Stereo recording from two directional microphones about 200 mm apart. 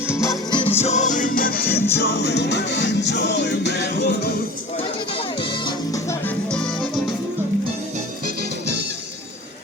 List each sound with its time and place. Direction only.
0.2 s music: 20° left (ahead or behind); by 4.4 s 50° left (ahead or behind)
5.1 s music: 25° left (ahead or behind); by 6.7 s 5° left (ahead or behind)